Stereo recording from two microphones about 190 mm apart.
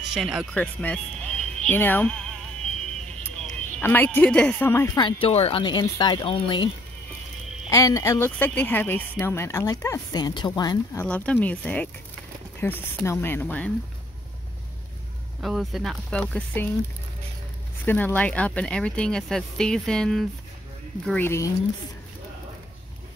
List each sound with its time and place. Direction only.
0.1 s speech: 5° right (ahead or behind)
4.9 s speech: 25° left (ahead or behind)
7.7 s speech: 15° left (ahead or behind)
11.1 s speech: 10° left (ahead or behind)
15.4 s speech: centre (ahead or behind)
17.8 s speech: 10° left (ahead or behind)